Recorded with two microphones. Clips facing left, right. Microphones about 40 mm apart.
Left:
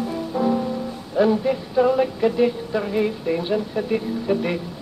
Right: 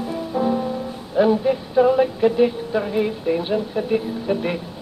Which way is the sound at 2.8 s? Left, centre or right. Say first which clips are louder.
Right 1 dB; centre.